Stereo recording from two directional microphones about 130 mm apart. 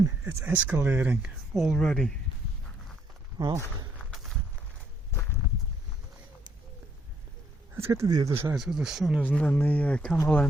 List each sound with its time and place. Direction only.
0.3 s speech: 15° right (ahead or behind); by 2.1 s 5° left (ahead or behind)
3.3 s speech: 30° right (ahead or behind)
3.9 s a sound: centre (ahead or behind)
7.8 s speech: 20° right (ahead or behind)
8.5 s speech: centre (ahead or behind)
9.2 s speech: 10° left (ahead or behind)